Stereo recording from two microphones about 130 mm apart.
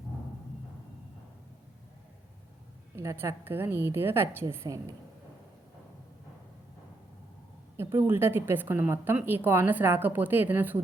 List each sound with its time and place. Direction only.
2.9 s a woman's voice: 20° right (ahead or behind)
7.8 s speech: 20° right (ahead or behind)